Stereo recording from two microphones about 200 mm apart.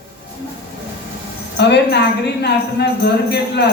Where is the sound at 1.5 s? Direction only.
60° left (ahead or behind).